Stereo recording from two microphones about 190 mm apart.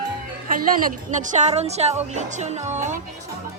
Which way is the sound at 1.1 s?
40° right (ahead or behind).